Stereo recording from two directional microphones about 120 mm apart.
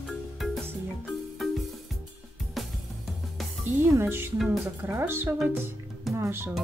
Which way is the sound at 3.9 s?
20° right (ahead or behind).